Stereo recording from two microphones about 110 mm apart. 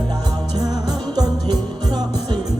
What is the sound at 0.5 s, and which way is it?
Music, 35° right (ahead or behind).